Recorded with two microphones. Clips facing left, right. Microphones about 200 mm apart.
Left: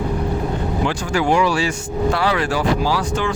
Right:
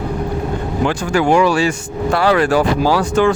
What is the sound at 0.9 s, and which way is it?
Speech, 50° right (ahead or behind).